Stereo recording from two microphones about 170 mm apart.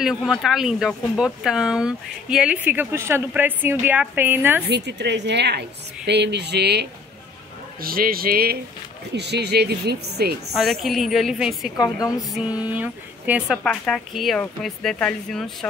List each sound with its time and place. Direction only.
0.0 s speech: centre (ahead or behind)
4.6 s a woman's voice: 85° right
7.8 s a man's voice: 60° right (ahead or behind)
9.1 s speech: 80° right
10.5 s speech: centre (ahead or behind)
11.7 s a woman's voice: 20° left (ahead or behind)
12.6 s speech: 10° right (ahead or behind)
13.7 s speech: centre (ahead or behind)